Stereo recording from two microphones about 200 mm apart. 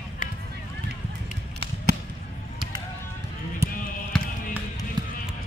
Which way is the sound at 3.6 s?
15° right (ahead or behind).